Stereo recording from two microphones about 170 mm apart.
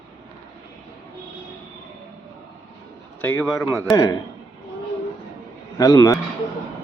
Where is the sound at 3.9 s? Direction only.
15° left (ahead or behind).